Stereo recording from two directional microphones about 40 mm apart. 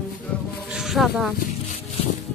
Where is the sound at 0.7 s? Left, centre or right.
Centre.